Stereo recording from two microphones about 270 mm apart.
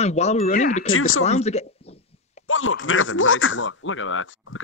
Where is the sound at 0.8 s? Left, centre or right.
Left.